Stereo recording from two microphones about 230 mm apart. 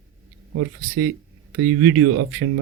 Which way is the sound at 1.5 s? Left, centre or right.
Right.